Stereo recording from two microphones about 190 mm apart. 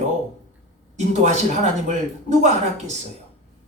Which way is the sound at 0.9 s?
35° right (ahead or behind).